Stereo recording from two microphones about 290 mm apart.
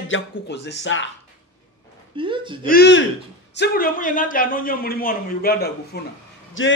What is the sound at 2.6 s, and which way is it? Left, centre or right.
A man's voice, left.